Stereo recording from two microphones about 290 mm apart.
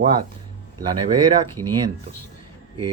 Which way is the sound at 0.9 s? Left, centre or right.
Centre.